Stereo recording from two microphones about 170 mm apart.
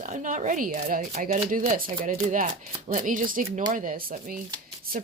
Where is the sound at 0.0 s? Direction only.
50° right (ahead or behind).